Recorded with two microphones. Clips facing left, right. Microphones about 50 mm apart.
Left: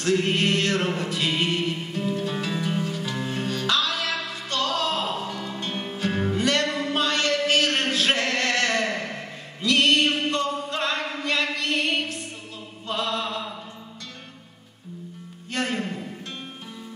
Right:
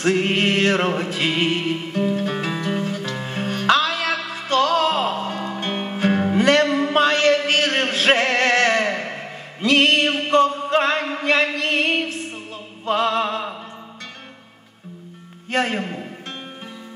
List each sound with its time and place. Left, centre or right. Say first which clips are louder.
0.0 s music: right 3 dB; right
12.8 s mantra: right 8 dB; right
15.5 s a sound: right 5 dB; right